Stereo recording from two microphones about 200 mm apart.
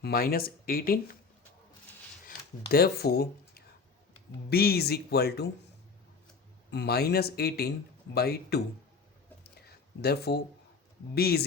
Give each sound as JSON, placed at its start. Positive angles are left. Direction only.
{"t": 0.0, "sound": "speech", "side_deg": 50}
{"t": 2.2, "sound": "speech", "side_deg": 50}
{"t": 6.7, "sound": "speech", "side_deg": 55}
{"t": 10.0, "sound": "speech", "side_deg": 55}